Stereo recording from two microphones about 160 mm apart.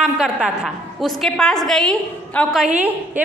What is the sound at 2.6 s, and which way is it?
Speech, 10° right (ahead or behind).